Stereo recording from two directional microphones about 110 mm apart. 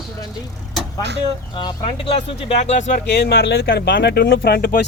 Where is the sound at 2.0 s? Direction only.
70° left (ahead or behind); by 2.9 s 90° left.